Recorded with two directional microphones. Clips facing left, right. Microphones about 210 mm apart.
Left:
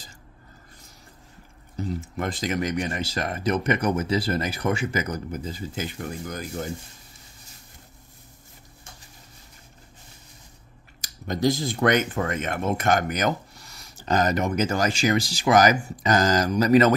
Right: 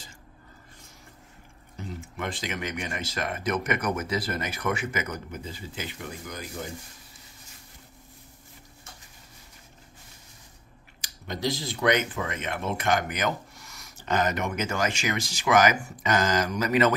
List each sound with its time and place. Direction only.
1.8 s speech: 40° left (ahead or behind)
11.0 s speech: 45° left (ahead or behind)